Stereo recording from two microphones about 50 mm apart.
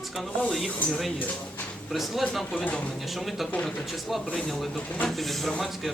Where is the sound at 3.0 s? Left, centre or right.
Centre.